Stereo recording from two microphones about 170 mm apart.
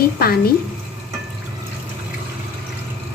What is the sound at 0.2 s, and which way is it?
Speech, 65° left (ahead or behind).